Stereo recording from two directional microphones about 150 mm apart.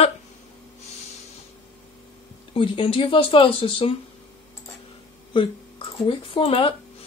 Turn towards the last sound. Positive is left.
turn(degrees=35)  # may be behind; listen again after turning